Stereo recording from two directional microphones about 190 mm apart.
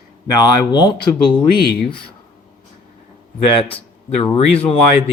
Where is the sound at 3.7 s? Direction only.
30° left (ahead or behind).